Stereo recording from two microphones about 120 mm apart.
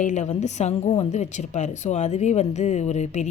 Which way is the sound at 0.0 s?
85° left.